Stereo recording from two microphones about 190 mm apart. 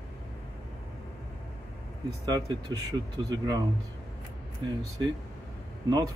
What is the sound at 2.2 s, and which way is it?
Speech, 20° right (ahead or behind).